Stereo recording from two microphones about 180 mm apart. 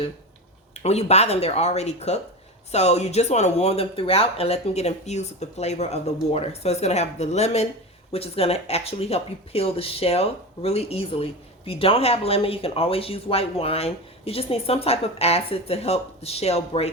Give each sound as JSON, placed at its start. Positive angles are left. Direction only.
{"t": 0.8, "sound": "speech", "side_deg": 35}